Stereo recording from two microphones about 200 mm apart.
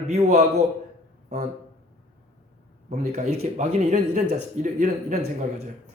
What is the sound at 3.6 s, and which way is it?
A man's voice, 35° right (ahead or behind).